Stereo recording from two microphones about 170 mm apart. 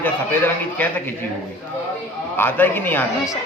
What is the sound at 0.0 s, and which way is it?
A man's voice, 10° left (ahead or behind).